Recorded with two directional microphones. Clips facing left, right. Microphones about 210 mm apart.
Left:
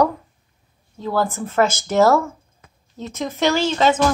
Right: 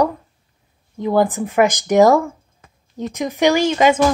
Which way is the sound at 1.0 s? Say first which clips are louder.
Right 5 dB; 15° right (ahead or behind).